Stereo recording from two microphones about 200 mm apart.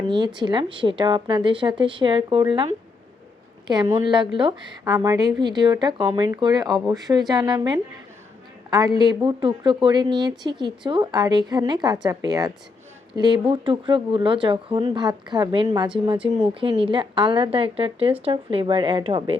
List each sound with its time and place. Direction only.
0.3 s a woman's voice: 20° right (ahead or behind)
3.7 s a woman's voice: 20° right (ahead or behind)
9.0 s a woman's voice: 20° right (ahead or behind)